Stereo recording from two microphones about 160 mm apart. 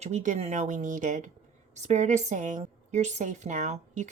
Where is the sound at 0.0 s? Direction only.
50° right (ahead or behind).